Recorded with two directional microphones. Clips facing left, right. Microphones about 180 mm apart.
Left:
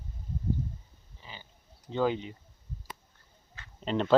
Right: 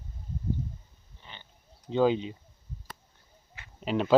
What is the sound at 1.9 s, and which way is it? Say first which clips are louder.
Speech: right 4 dB; 15° right (ahead or behind).